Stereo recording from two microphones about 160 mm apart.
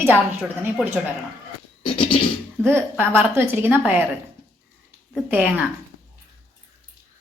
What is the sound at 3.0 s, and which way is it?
A woman's voice, 15° right (ahead or behind).